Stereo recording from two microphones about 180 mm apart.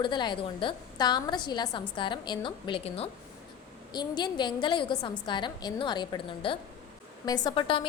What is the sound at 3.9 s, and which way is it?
A woman's voice, 25° left (ahead or behind).